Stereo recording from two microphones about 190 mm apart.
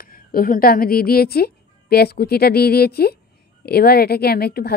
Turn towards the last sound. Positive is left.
turn(degrees=55)  # may be behind; listen again after turning